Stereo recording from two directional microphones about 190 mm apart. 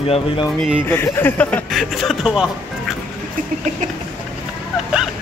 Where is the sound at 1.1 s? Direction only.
10° left (ahead or behind).